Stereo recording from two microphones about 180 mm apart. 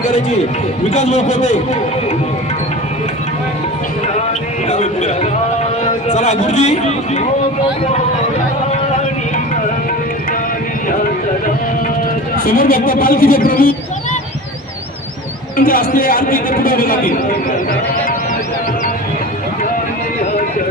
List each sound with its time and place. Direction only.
0.9 s a man's voice: 40° left (ahead or behind)
4.7 s a man's voice: 40° left (ahead or behind)
12.5 s speech: 55° left (ahead or behind)
15.5 s speech: 55° left (ahead or behind)